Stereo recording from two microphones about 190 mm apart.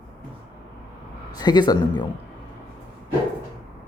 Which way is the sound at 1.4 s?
20° left (ahead or behind).